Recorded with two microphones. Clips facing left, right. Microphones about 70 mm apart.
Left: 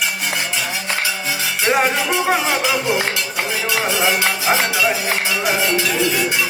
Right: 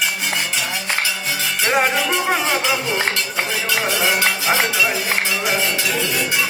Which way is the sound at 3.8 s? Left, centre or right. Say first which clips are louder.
Left 1 dB; centre.